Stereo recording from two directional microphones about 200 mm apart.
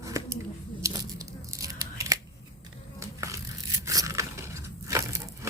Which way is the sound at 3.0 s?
15° right (ahead or behind).